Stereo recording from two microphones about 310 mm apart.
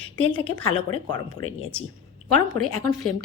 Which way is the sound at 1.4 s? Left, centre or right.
Left.